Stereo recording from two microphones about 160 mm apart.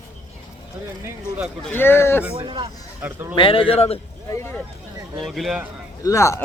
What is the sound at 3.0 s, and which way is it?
Speech, 10° right (ahead or behind).